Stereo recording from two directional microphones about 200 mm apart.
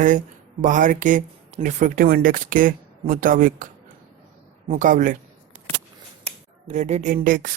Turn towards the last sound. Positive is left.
turn(degrees=-40)  # may be behind; listen again after turning